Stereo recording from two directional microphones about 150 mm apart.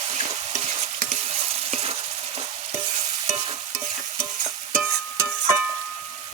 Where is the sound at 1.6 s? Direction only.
45° right (ahead or behind).